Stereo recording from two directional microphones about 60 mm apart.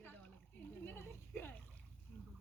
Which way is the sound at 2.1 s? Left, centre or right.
Centre.